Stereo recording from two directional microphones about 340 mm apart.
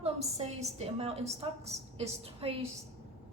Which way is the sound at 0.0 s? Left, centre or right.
Centre.